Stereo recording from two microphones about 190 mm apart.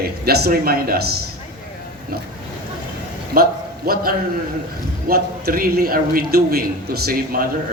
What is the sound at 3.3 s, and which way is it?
Speech, 55° right (ahead or behind).